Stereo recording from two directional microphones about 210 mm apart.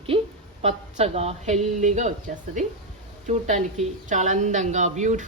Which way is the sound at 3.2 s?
35° right (ahead or behind).